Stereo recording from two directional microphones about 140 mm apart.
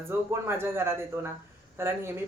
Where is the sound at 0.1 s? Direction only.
15° right (ahead or behind).